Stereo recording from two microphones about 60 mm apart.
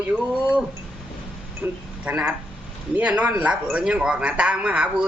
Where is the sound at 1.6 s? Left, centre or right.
Right.